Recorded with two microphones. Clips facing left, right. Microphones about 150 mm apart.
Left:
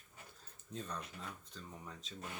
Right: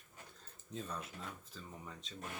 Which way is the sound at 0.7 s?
Centre (ahead or behind).